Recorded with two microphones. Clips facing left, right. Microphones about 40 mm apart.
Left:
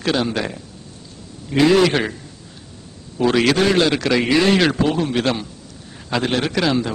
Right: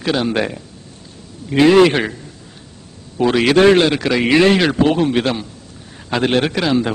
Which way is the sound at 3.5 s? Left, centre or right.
Right.